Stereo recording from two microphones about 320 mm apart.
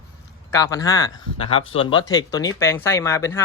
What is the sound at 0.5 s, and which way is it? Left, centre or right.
Speech, centre.